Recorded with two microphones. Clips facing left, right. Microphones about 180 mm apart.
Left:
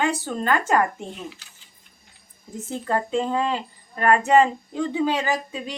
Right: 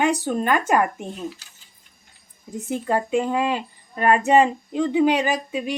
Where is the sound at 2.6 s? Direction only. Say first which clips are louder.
Right 2 dB; 15° right (ahead or behind).